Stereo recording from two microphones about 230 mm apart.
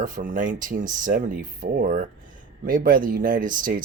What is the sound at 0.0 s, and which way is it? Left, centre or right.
Speech, right.